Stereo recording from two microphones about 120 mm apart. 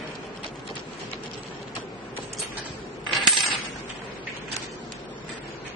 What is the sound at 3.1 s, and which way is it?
Coin, centre (ahead or behind).